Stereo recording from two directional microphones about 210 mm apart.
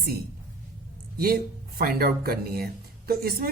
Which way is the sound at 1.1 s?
45° right (ahead or behind).